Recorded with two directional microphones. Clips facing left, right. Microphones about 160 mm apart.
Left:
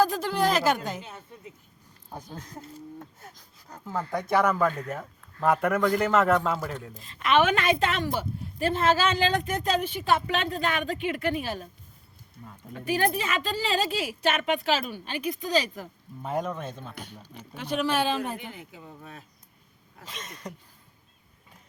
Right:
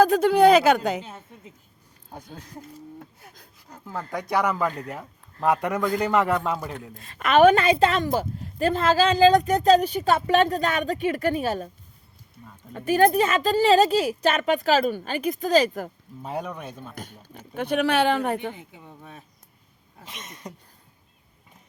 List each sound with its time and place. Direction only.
0.0 s speech: 60° right (ahead or behind)
2.4 s speech: 30° left (ahead or behind)
4.2 s a man's voice: 15° right (ahead or behind)
7.2 s speech: 45° right (ahead or behind)
12.7 s a woman's voice: 45° right (ahead or behind)
16.5 s a man's voice: 10° right (ahead or behind)
16.9 s speech: 45° right (ahead or behind); by 18.3 s 65° right (ahead or behind)
18.5 s speech: 20° right (ahead or behind)